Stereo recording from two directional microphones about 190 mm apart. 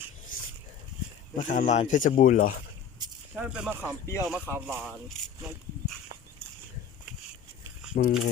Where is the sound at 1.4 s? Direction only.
40° left (ahead or behind).